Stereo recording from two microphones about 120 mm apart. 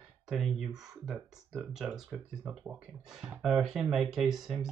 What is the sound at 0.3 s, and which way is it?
Speech, centre (ahead or behind).